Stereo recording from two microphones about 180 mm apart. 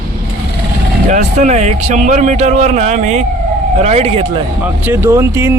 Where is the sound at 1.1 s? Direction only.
40° right (ahead or behind).